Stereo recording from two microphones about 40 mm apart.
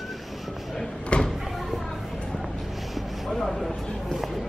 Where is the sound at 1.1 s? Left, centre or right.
Left.